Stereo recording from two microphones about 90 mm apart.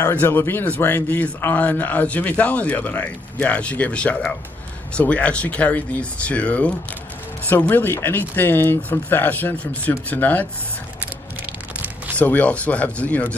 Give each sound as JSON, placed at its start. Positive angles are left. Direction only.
{"t": 0.1, "sound": "a man's voice", "side_deg": 25}
{"t": 12.2, "sound": "a man's voice", "side_deg": 15}